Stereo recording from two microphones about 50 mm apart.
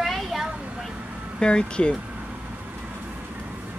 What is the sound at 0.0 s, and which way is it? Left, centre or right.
Vehicle, centre.